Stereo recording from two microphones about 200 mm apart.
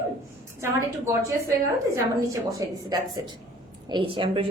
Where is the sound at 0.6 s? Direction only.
15° right (ahead or behind).